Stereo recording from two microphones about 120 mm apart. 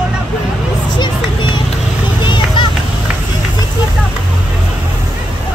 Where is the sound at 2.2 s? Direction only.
40° left (ahead or behind).